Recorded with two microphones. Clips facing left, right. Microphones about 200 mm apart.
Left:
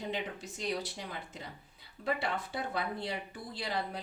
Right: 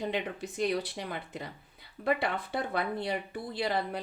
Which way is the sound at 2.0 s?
60° right (ahead or behind).